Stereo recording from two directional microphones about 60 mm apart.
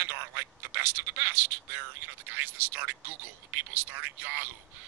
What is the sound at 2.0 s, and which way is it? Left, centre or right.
A man's voice, right.